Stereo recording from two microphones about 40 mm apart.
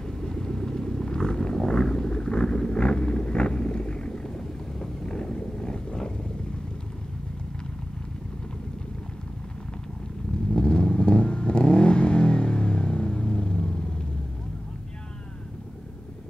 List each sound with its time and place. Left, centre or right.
0.0 s vehicle: centre
10.5 s vehicle: left